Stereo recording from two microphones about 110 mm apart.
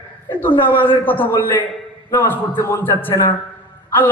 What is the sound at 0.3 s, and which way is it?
A woman's voice, 20° left (ahead or behind).